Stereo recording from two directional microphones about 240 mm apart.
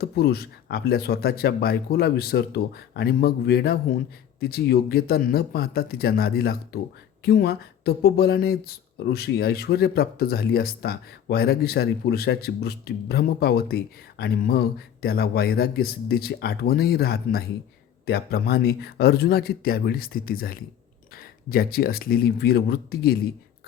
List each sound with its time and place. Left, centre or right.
0.0 s speech: left